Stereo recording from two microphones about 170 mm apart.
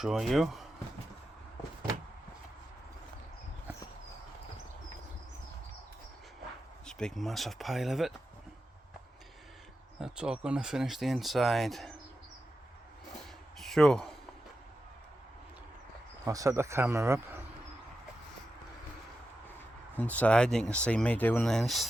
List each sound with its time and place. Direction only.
0.0 s speech: centre (ahead or behind)
6.8 s speech: 5° left (ahead or behind)
10.0 s speech: 5° right (ahead or behind)
13.6 s a sound: 5° left (ahead or behind)
16.2 s speech: 20° right (ahead or behind)
20.0 s speech: 10° left (ahead or behind)